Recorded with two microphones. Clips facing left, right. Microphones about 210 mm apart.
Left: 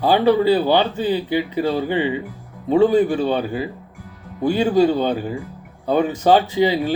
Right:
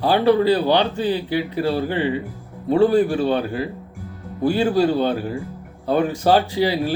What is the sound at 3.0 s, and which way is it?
Speech, 10° right (ahead or behind).